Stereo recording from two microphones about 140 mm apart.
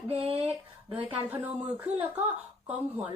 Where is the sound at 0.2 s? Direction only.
40° right (ahead or behind).